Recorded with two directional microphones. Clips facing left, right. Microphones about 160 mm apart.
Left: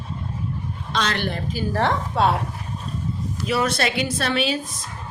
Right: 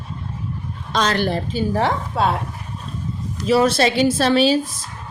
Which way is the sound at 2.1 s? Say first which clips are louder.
Left 1 dB; centre (ahead or behind).